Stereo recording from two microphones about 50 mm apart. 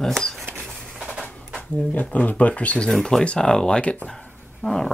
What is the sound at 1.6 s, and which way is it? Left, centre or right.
Speech, left.